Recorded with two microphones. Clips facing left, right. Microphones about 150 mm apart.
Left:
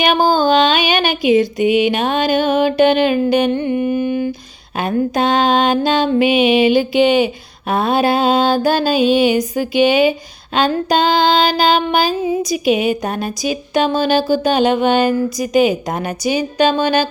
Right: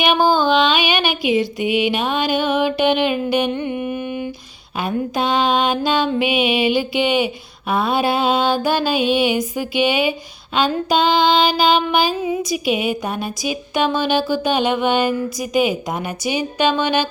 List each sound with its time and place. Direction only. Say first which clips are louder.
0.3 s music: left 3 dB; 40° left (ahead or behind)
1.6 s a sound: left 4 dB; 45° left (ahead or behind)
7.7 s music: left 3 dB; 45° left (ahead or behind)
12.7 s a woman's voice: left 4 dB; 10° right (ahead or behind)
13.7 s music: left 3 dB; 40° left (ahead or behind)